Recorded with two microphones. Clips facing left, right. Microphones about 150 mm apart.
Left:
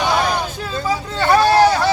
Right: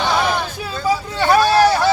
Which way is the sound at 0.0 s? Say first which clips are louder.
Even; 15° left (ahead or behind).